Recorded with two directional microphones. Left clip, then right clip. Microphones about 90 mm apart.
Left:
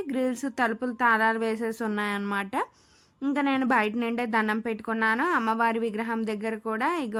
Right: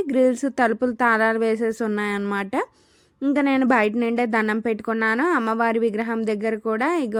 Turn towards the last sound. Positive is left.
turn(degrees=-35)  # may be behind; listen again after turning